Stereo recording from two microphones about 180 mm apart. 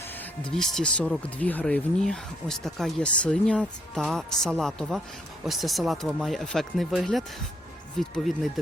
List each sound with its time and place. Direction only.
0.2 s speech: 5° left (ahead or behind)